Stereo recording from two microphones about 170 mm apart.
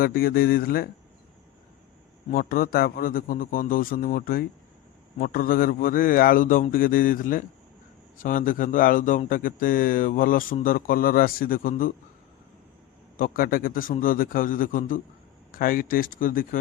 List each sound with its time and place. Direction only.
0.0 s a man's voice: 60° left (ahead or behind)
2.3 s a man's voice: 55° left (ahead or behind)
13.1 s a man's voice: 55° left (ahead or behind)